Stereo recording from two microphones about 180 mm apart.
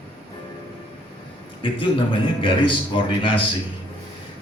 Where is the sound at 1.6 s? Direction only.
30° left (ahead or behind).